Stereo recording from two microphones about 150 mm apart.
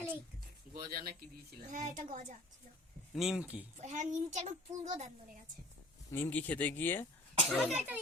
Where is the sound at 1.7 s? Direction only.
60° right (ahead or behind).